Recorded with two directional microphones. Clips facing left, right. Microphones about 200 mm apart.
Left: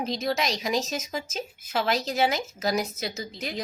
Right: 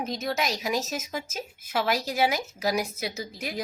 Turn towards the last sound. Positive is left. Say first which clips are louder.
# even
turn(degrees=-10)  # may be behind; listen again after turning